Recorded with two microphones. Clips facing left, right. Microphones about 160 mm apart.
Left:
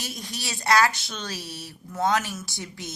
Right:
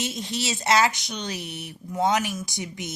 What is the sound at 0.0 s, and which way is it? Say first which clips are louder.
A woman's voice: right 6 dB; 25° right (ahead or behind).